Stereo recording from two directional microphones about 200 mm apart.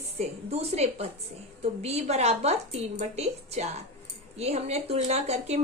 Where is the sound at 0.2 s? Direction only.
30° right (ahead or behind).